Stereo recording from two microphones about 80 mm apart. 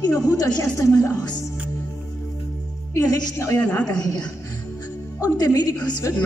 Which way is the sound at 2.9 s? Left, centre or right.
Left.